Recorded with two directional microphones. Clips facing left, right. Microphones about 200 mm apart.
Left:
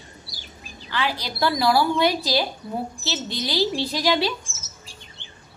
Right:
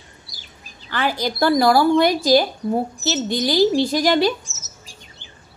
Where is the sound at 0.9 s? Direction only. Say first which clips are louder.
Right 5 dB; 45° right (ahead or behind).